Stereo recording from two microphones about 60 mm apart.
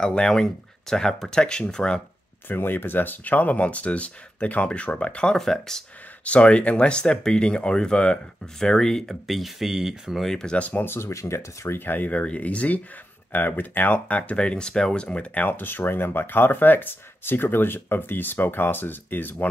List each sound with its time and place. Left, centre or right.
0.0 s speech: centre
2.4 s speech: left; by 5.4 s centre
5.4 s speech: centre
6.2 s speech: left; by 10.2 s centre
10.2 s speech: centre
10.6 s speech: left
11.1 s speech: left
11.8 s speech: left